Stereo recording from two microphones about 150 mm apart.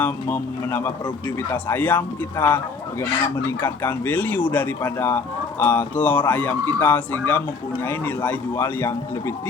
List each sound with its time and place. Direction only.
0.0 s speech: 10° left (ahead or behind)
3.6 s speech: 10° left (ahead or behind)